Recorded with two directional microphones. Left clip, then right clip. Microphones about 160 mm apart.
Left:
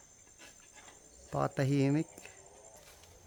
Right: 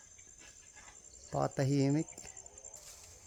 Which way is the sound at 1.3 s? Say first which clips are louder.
Left 1 dB; 20° right (ahead or behind).